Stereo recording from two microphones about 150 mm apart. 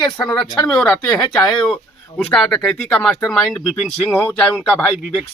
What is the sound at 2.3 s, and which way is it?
Speech, 5° left (ahead or behind).